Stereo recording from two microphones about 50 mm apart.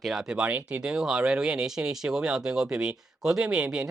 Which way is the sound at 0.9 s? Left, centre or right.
Centre.